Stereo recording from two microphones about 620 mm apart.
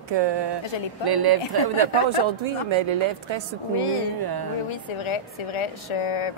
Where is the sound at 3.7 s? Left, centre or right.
Left.